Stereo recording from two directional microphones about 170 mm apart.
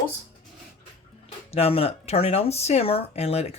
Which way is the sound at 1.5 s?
35° left (ahead or behind).